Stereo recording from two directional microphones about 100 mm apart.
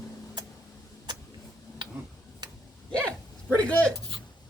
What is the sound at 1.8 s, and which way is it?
Tick-tock, 45° right (ahead or behind).